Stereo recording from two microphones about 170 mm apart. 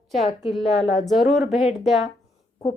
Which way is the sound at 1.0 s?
Centre (ahead or behind).